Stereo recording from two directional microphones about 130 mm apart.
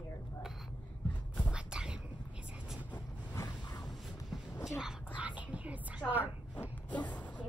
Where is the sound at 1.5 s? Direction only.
5° right (ahead or behind).